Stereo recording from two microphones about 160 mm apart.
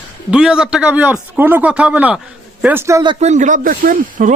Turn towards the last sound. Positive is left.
turn(degrees=-55)  # may be behind; listen again after turning